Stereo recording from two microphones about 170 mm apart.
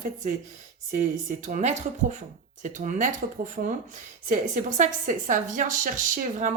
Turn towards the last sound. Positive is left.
turn(degrees=-50)  # may be behind; listen again after turning